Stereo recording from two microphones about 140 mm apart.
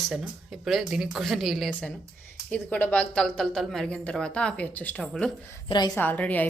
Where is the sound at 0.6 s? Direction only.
Centre (ahead or behind).